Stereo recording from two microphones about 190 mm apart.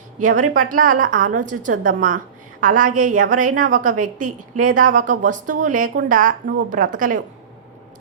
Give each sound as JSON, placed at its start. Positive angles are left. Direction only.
{"t": 0.2, "sound": "a woman's voice", "side_deg": -40}